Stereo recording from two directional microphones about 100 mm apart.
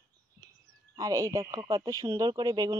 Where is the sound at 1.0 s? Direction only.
35° right (ahead or behind).